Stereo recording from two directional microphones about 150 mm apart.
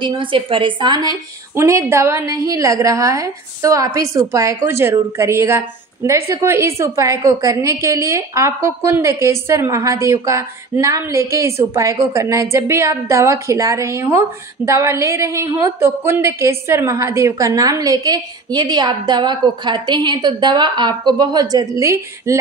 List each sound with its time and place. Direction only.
0.0 s a woman's voice: 35° right (ahead or behind)